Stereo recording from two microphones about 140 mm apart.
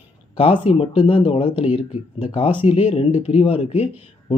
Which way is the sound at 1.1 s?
45° left (ahead or behind).